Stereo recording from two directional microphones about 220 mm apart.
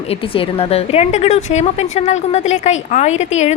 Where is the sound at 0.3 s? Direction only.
25° left (ahead or behind).